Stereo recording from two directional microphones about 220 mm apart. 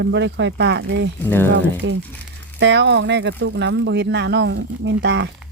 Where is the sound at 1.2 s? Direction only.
10° left (ahead or behind).